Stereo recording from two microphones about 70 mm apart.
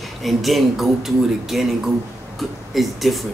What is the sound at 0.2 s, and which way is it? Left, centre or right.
A man's voice, centre.